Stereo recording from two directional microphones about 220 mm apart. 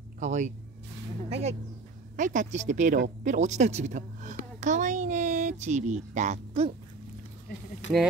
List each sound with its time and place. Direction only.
0.2 s speech: 35° right (ahead or behind)
2.1 s a woman's voice: 35° right (ahead or behind)
7.8 s speech: 55° left (ahead or behind)